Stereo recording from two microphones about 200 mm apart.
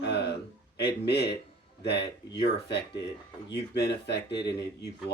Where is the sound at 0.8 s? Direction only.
55° left (ahead or behind).